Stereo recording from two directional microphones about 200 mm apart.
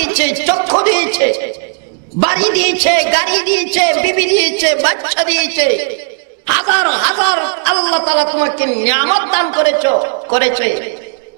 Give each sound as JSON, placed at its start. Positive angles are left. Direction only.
{"t": 0.0, "sound": "a sound", "side_deg": -10}
{"t": 0.6, "sound": "speech", "side_deg": -30}
{"t": 0.8, "sound": "a man's voice", "side_deg": -10}